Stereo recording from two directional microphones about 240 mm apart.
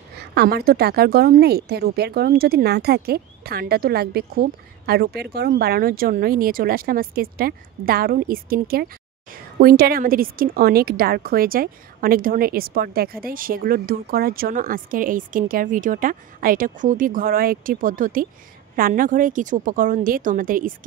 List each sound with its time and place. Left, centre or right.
0.2 s speech: right